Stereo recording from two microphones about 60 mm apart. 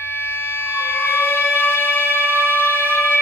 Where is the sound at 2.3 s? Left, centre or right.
Right.